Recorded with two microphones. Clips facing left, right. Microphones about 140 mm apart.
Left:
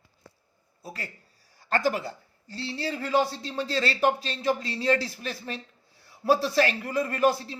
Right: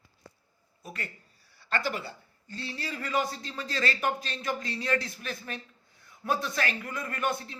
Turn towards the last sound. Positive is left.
turn(degrees=30)  # may be behind; listen again after turning